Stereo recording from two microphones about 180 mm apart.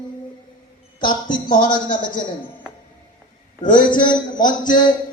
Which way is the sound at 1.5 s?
50° left (ahead or behind).